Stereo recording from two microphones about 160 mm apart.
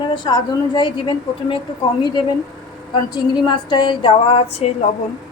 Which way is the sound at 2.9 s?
25° left (ahead or behind).